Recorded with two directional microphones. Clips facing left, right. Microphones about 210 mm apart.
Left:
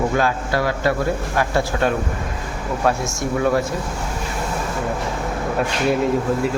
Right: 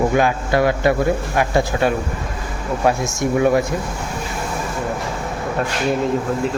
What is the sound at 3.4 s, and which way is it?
Speech, 15° right (ahead or behind).